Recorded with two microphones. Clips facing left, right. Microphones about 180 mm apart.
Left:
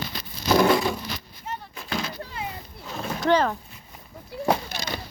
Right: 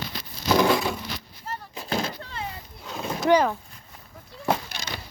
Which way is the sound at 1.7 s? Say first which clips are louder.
Right 4 dB; 30° right (ahead or behind).